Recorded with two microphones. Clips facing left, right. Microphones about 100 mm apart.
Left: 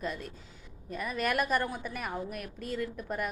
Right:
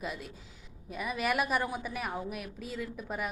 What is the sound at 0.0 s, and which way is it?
A woman's voice, 5° right (ahead or behind).